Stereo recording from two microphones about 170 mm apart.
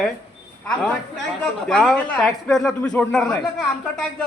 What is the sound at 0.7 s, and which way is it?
Speech, 5° left (ahead or behind).